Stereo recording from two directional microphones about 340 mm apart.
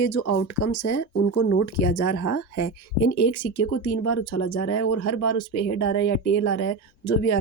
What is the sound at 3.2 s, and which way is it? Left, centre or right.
Speech, left.